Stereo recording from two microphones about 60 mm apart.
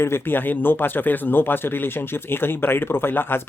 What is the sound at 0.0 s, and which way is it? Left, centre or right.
Speech, left.